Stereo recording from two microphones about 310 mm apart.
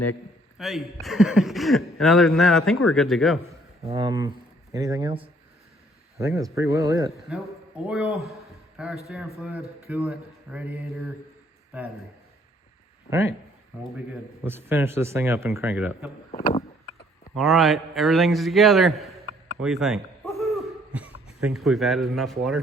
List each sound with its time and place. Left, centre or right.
0.6 s a man's voice: centre
3.8 s a man's voice: centre
13.1 s speech: centre
14.4 s speech: centre
16.3 s vehicle: centre
17.3 s a man's voice: centre
19.6 s hoot: centre
21.4 s a man's voice: centre